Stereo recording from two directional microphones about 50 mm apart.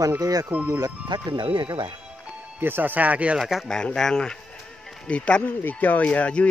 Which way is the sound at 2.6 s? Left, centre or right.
Right.